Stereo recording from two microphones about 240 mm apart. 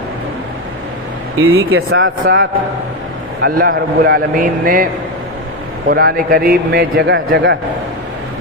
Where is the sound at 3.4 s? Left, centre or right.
Right.